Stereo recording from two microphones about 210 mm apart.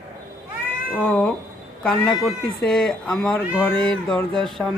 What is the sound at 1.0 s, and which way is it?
A man's voice, 5° left (ahead or behind).